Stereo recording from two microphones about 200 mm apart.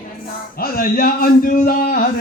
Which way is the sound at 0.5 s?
45° left (ahead or behind).